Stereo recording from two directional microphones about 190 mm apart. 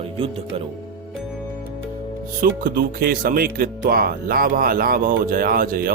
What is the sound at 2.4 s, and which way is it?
Speech, 50° right (ahead or behind).